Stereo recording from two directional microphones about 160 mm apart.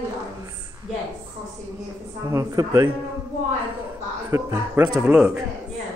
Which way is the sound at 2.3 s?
20° right (ahead or behind).